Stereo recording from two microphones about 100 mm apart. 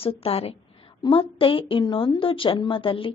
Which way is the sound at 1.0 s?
60° left (ahead or behind).